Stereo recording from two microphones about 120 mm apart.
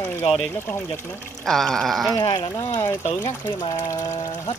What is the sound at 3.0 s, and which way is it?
Speech, 65° left (ahead or behind).